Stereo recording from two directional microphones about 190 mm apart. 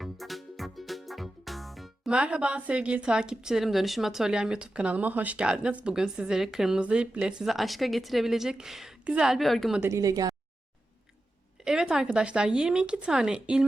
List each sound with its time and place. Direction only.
0.0 s music: centre (ahead or behind)
9.8 s a woman's voice: 15° right (ahead or behind)
11.6 s speech: 5° right (ahead or behind)